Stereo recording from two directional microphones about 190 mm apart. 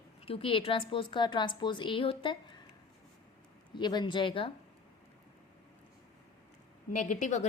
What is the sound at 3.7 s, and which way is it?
Speech, 25° left (ahead or behind).